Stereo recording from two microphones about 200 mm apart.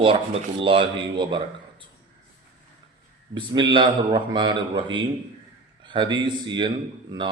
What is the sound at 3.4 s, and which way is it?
Speech, 25° right (ahead or behind).